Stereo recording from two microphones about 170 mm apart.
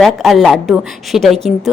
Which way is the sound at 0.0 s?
Centre (ahead or behind).